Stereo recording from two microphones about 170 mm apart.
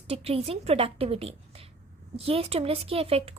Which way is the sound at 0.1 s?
35° right (ahead or behind).